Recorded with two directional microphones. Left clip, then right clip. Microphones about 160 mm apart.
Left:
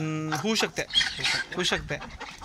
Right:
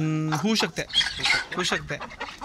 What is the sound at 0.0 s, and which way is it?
Speech, 25° right (ahead or behind).